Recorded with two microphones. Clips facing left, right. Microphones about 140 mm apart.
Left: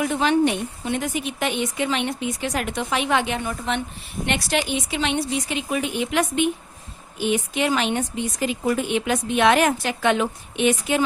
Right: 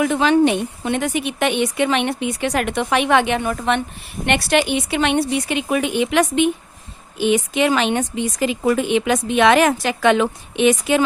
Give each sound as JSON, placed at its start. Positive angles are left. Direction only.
{"t": 0.0, "sound": "speech", "side_deg": -90}